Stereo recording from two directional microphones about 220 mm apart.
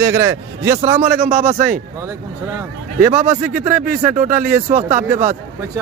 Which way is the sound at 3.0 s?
35° right (ahead or behind).